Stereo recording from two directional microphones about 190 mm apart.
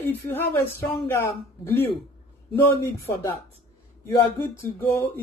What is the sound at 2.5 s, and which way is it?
Speech, 10° left (ahead or behind).